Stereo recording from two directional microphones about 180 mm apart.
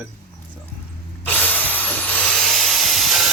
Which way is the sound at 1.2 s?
10° left (ahead or behind).